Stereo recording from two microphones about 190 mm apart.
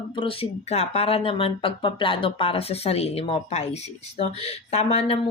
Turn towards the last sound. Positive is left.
turn(degrees=35)  # may be behind; listen again after turning